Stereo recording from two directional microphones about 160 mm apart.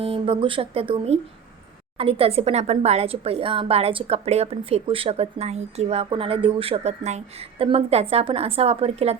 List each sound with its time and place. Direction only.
0.0 s a woman's voice: 35° right (ahead or behind)